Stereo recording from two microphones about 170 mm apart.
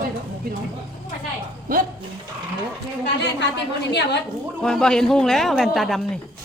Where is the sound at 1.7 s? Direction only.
55° right (ahead or behind).